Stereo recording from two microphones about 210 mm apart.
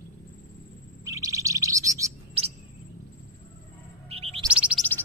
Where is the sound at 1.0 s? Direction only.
15° right (ahead or behind).